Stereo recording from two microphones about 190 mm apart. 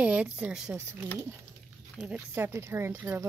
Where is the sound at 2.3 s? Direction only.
15° right (ahead or behind).